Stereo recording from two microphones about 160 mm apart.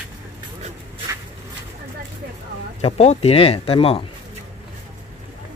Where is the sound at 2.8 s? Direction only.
45° left (ahead or behind).